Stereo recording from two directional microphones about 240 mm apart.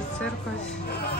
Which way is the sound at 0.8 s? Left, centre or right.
Left.